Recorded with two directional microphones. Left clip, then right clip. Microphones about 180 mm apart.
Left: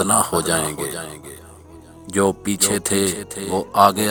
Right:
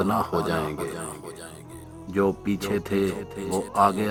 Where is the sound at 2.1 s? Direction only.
45° left (ahead or behind).